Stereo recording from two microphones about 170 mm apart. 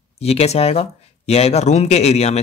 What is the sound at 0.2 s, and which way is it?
Speech, 35° left (ahead or behind).